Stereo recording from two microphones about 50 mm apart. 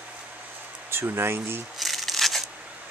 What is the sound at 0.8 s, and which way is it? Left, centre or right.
Speech, right.